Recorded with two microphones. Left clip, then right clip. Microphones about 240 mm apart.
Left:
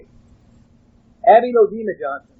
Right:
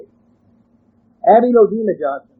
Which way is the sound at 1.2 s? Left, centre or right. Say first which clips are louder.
Right 1 dB; left.